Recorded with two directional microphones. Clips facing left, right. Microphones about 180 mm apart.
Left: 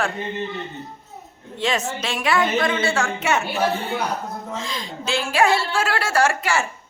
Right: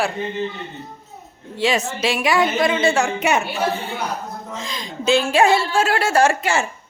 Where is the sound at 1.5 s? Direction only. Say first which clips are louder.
Right 3 dB; 10° right (ahead or behind).